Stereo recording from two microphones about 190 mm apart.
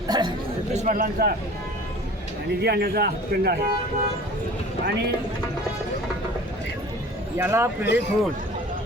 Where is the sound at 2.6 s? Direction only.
60° right (ahead or behind).